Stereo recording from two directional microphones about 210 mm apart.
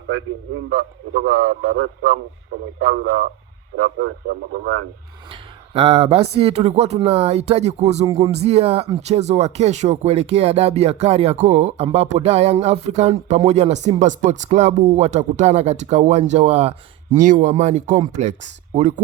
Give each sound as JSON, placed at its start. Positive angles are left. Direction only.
{"t": 0.7, "sound": "a man's voice", "side_deg": -50}
{"t": 5.3, "sound": "speech", "side_deg": -30}